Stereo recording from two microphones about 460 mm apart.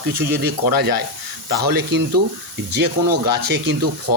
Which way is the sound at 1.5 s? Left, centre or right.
Centre.